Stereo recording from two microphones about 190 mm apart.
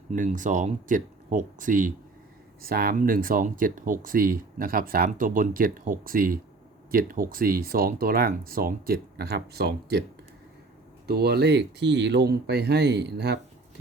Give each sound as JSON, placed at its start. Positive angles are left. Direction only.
{"t": 0.1, "sound": "speech", "side_deg": -40}
{"t": 11.0, "sound": "speech", "side_deg": -55}